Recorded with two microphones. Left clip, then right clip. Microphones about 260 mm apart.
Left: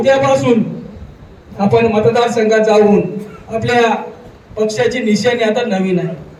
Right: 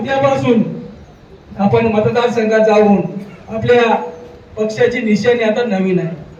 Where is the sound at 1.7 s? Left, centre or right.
Left.